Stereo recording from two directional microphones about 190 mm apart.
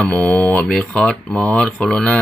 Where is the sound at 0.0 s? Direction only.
5° left (ahead or behind).